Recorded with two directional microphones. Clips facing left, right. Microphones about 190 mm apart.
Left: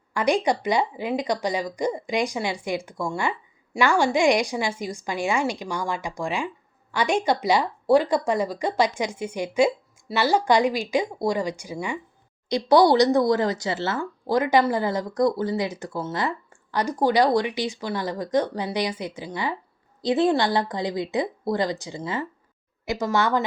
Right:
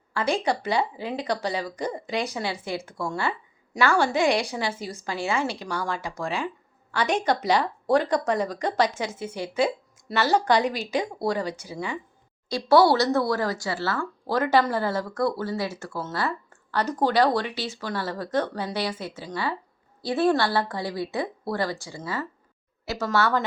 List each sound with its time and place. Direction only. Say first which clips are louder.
0.1 s speech: left 3 dB; 15° left (ahead or behind)